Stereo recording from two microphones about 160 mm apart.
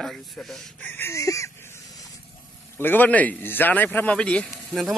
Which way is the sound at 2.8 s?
10° left (ahead or behind).